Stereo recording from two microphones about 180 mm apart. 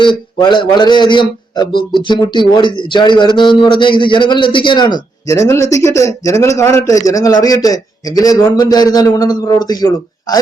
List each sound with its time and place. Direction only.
0.0 s a man's voice: 25° left (ahead or behind)